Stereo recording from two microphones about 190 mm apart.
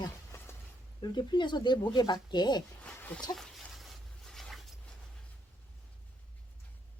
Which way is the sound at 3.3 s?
Centre (ahead or behind).